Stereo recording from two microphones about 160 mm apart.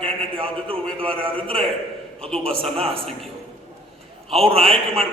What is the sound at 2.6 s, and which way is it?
Speech, 35° right (ahead or behind).